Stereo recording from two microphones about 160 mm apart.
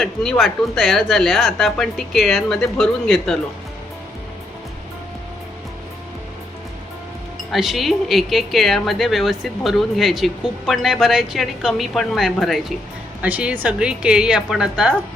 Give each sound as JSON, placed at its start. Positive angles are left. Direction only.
{"t": 0.0, "sound": "a woman's voice", "side_deg": 0}
{"t": 7.5, "sound": "a woman's voice", "side_deg": 0}